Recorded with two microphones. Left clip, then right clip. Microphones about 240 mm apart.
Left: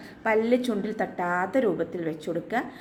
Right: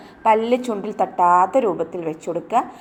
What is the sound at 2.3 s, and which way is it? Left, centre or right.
Speech, right.